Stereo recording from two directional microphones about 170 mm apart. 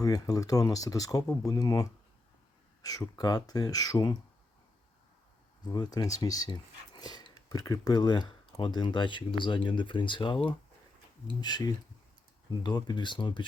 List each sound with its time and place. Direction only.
0.0 s speech: 20° left (ahead or behind)
5.7 s speech: 25° left (ahead or behind)